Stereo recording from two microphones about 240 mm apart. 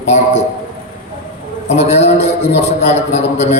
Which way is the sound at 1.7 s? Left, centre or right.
Left.